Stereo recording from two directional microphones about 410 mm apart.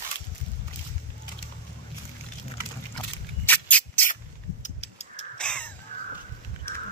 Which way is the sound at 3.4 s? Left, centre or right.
Centre.